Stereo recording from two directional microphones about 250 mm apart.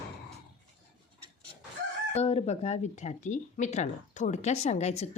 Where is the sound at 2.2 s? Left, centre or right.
Left.